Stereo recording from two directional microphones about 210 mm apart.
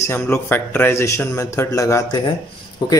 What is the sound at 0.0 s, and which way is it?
A man's voice, 10° left (ahead or behind).